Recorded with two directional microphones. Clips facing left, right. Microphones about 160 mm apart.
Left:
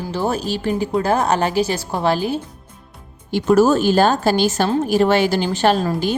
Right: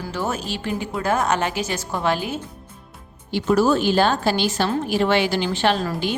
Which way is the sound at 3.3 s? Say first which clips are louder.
Left 4 dB; 45° left (ahead or behind).